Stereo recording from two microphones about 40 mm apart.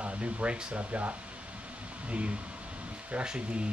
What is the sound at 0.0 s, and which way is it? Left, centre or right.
Speech, right.